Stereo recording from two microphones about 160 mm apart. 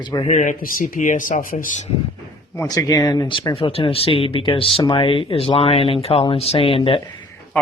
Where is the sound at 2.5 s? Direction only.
20° left (ahead or behind).